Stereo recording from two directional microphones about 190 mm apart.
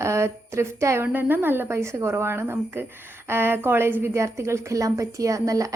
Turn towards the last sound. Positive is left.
turn(degrees=-15)  # may be behind; listen again after turning